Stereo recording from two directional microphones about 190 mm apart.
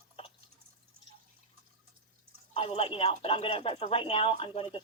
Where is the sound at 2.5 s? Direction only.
30° left (ahead or behind).